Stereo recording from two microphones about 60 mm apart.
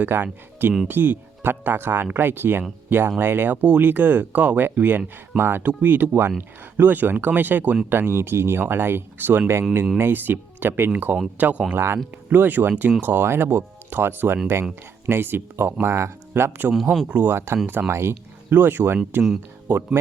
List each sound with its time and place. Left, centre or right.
0.0 s speech: right
5.4 s speech: right
7.9 s speech: right
11.7 s speech: right
12.3 s speech: right